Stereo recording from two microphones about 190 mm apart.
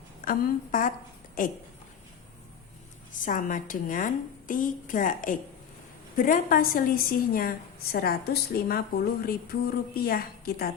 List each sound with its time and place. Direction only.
0.3 s a woman's voice: 45° left (ahead or behind)
3.2 s a woman's voice: 45° left (ahead or behind)